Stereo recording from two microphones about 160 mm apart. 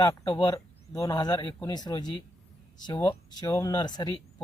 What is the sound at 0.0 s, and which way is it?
Speech, 25° left (ahead or behind).